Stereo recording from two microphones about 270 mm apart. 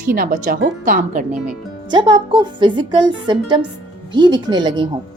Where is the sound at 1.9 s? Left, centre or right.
Centre.